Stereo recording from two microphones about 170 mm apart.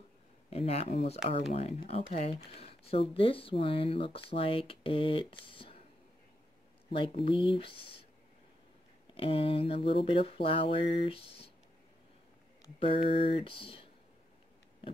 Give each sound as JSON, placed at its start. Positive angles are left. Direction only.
{"t": 0.5, "sound": "speech", "side_deg": 40}
{"t": 6.9, "sound": "speech", "side_deg": 35}
{"t": 9.1, "sound": "speech", "side_deg": 35}
{"t": 12.7, "sound": "speech", "side_deg": 30}